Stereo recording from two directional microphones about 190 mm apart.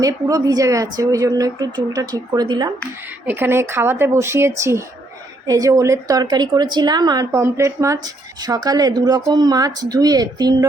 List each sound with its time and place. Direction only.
0.0 s a woman's voice: 20° right (ahead or behind)